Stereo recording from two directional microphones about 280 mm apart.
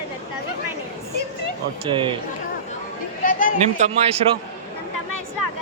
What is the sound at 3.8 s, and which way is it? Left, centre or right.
Speech, right.